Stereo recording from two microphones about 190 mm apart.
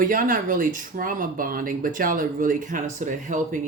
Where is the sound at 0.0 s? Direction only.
45° right (ahead or behind).